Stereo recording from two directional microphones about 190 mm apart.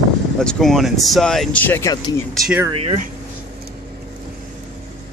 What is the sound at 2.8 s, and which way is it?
Speech, 40° right (ahead or behind).